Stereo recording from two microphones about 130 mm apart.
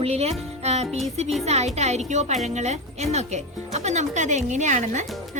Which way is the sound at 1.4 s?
55° right (ahead or behind).